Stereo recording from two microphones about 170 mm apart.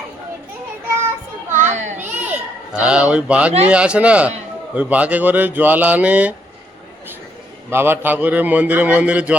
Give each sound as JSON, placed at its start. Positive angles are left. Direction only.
{"t": 1.5, "sound": "children playing", "side_deg": -45}
{"t": 2.0, "sound": "children playing", "side_deg": -10}
{"t": 3.7, "sound": "a man's voice", "side_deg": -5}
{"t": 7.7, "sound": "a man's voice", "side_deg": -15}